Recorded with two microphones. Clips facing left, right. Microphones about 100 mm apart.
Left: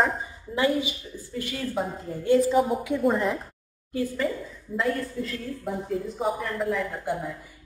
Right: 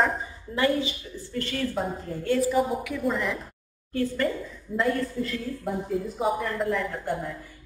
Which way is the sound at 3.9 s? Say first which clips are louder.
Right 1 dB; 10° left (ahead or behind).